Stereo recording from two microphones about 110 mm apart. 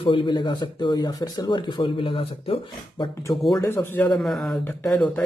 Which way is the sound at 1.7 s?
50° left (ahead or behind).